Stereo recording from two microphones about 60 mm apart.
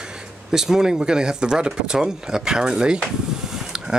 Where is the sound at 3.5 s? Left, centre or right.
Centre.